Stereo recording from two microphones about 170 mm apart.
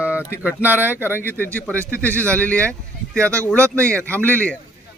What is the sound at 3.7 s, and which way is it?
Speech, 10° left (ahead or behind).